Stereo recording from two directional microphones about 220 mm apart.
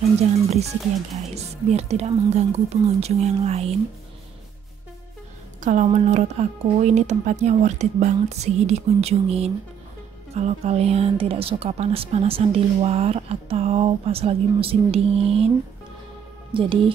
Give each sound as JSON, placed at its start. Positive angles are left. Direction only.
{"t": 1.3, "sound": "speech", "side_deg": -30}
{"t": 5.6, "sound": "speech", "side_deg": -35}
{"t": 16.5, "sound": "speech", "side_deg": -25}